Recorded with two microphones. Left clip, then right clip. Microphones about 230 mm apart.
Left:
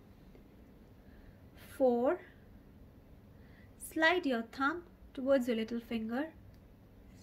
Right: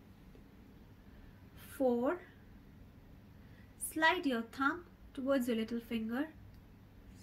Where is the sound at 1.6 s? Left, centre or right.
Centre.